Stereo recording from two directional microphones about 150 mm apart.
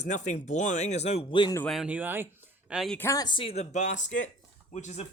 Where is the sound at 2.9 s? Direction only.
20° left (ahead or behind); by 5.1 s 50° left (ahead or behind).